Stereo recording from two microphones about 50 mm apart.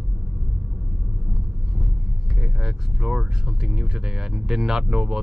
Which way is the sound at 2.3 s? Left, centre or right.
Centre.